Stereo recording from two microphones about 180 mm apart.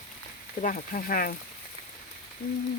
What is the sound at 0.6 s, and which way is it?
Speech, 45° left (ahead or behind).